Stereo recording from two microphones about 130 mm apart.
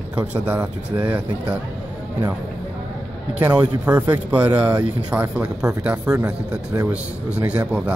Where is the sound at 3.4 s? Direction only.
10° right (ahead or behind).